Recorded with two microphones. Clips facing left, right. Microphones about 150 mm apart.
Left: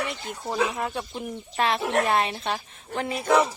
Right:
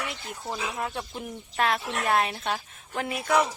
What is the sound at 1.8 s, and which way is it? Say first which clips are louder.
Speech: left 8 dB; 55° left (ahead or behind).